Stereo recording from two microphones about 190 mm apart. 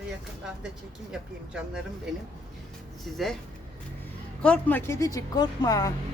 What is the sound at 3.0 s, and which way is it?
Speech, centre (ahead or behind).